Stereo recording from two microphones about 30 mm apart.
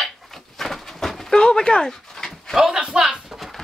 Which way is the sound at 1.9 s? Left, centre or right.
Centre.